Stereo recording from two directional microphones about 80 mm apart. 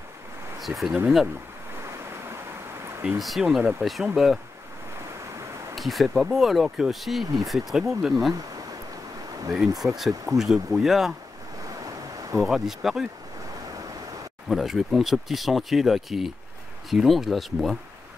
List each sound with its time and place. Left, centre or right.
0.6 s speech: centre
3.2 s speech: centre
5.8 s speech: centre
9.9 s speech: centre
11.8 s ocean: right
12.4 s speech: centre
14.5 s speech: centre